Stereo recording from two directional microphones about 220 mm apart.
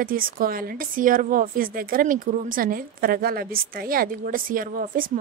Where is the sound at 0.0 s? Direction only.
40° right (ahead or behind).